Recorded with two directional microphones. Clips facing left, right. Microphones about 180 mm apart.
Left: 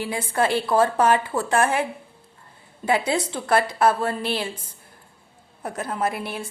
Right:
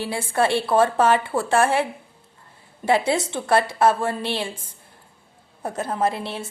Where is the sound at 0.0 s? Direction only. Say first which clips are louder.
Right 1 dB; 30° right (ahead or behind).